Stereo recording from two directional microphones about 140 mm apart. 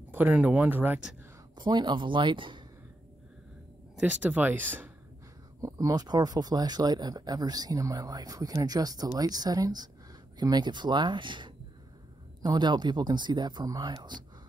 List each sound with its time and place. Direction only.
0.1 s speech: 10° right (ahead or behind)
1.5 s speech: 35° right (ahead or behind)
3.9 s speech: 10° right (ahead or behind); by 14.2 s 30° right (ahead or behind)